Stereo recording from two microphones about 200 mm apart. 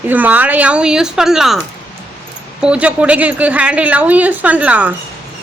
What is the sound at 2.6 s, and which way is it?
A woman's voice, 5° right (ahead or behind).